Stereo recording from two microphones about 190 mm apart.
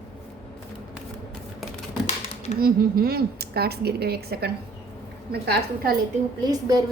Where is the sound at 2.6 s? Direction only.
50° right (ahead or behind).